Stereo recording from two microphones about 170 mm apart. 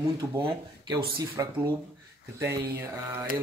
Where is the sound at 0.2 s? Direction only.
25° right (ahead or behind).